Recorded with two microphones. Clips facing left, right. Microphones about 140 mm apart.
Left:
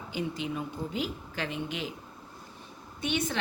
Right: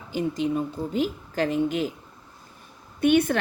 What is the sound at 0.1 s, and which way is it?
A woman's voice, 40° right (ahead or behind).